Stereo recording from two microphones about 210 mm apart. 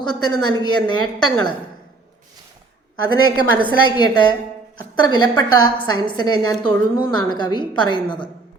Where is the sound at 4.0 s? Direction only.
20° left (ahead or behind).